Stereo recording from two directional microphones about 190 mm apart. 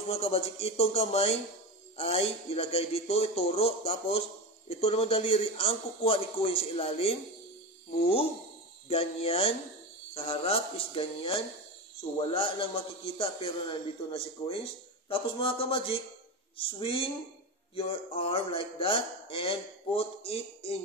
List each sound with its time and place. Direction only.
0.1 s a man's voice: 30° left (ahead or behind)